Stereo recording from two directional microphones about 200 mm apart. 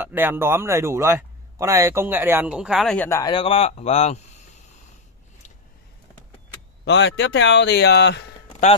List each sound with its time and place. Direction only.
0.0 s a man's voice: 10° right (ahead or behind)
3.1 s a man's voice: 20° left (ahead or behind)
6.8 s speech: 65° left (ahead or behind)